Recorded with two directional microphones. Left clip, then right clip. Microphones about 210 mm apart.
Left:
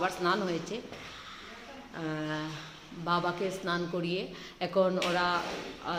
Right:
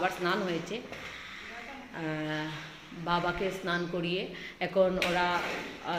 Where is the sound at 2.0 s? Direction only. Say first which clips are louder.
Right 1 dB; 5° left (ahead or behind).